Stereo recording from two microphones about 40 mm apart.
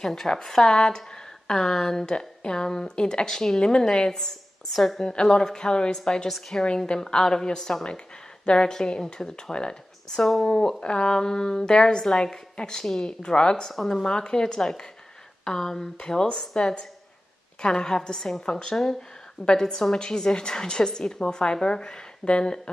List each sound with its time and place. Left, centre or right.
0.0 s a woman's voice: centre